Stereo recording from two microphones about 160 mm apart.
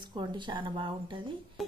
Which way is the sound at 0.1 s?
30° right (ahead or behind).